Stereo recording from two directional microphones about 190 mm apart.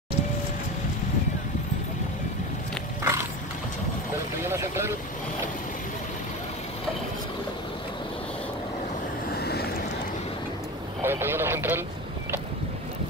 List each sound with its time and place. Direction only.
3.0 s a sound: 15° right (ahead or behind)
4.5 s speech: 15° right (ahead or behind)
9.3 s boat: 55° left (ahead or behind)
11.0 s radio: 10° right (ahead or behind)